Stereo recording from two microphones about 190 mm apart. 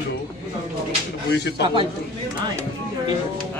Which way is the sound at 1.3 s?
60° left (ahead or behind).